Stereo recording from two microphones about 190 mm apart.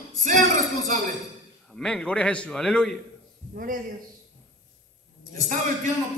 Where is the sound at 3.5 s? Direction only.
45° right (ahead or behind).